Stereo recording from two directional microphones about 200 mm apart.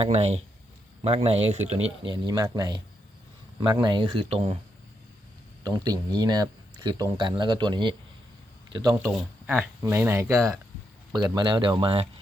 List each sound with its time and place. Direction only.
0.0 s speech: 30° right (ahead or behind)
5.6 s speech: 20° right (ahead or behind)
9.1 s speech: 10° right (ahead or behind); by 12.0 s 25° right (ahead or behind)